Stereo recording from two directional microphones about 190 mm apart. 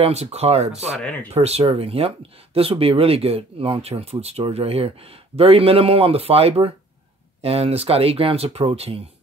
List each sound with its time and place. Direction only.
0.0 s speech: 35° right (ahead or behind)